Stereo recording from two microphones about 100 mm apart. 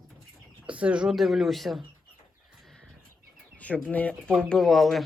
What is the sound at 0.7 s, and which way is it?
Speech, 10° right (ahead or behind).